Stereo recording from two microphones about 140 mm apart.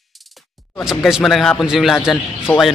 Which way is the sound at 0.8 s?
5° right (ahead or behind).